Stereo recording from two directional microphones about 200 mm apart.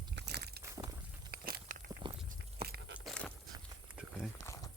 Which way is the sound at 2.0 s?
25° right (ahead or behind).